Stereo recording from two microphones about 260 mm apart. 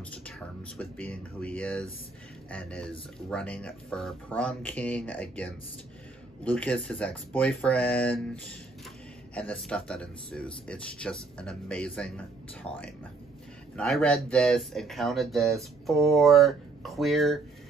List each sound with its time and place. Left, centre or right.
0.7 s speech: centre
9.3 s speech: centre
12.7 s speech: left
13.7 s speech: centre